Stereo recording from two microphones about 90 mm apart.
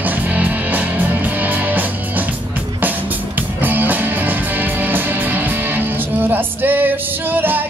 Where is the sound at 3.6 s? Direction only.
20° right (ahead or behind).